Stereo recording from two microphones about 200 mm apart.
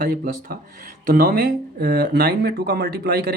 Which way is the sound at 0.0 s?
50° right (ahead or behind).